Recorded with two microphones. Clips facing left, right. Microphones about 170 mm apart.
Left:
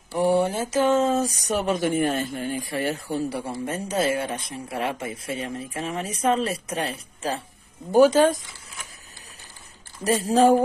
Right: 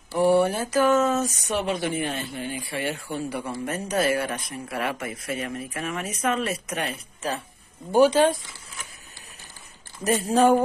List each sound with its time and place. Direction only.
0.1 s speech: 20° left (ahead or behind)
7.9 s speech: 40° left (ahead or behind)
10.0 s speech: 30° left (ahead or behind)